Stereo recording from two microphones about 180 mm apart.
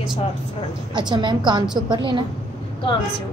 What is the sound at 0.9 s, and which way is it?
A woman's voice, 25° right (ahead or behind).